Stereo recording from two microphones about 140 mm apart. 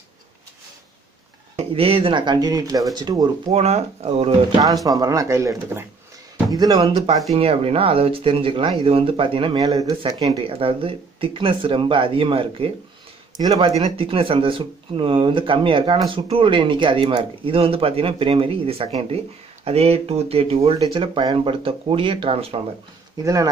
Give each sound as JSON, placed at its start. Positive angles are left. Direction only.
{"t": 1.6, "sound": "speech", "side_deg": -45}
{"t": 3.5, "sound": "speech", "side_deg": -50}
{"t": 4.5, "sound": "speech", "side_deg": -25}
{"t": 7.3, "sound": "speech", "side_deg": -45}
{"t": 9.6, "sound": "speech", "side_deg": -25}
{"t": 10.4, "sound": "speech", "side_deg": -40}
{"t": 13.4, "sound": "speech", "side_deg": -25}
{"t": 13.9, "sound": "speech", "side_deg": -40}
{"t": 23.2, "sound": "speech", "side_deg": -25}